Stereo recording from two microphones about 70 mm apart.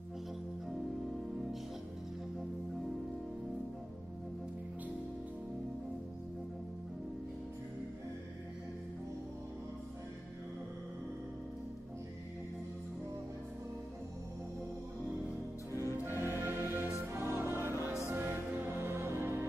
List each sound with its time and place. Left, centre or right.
15.7 s music: left
16.1 s music: right